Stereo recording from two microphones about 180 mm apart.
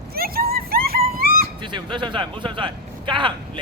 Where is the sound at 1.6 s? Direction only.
25° right (ahead or behind).